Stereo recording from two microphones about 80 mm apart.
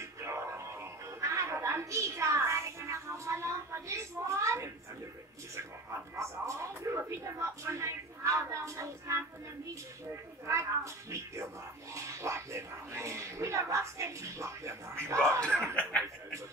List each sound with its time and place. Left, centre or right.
0.0 s music: right
5.6 s a sound: right
10.4 s speech: right
15.7 s chuckle: centre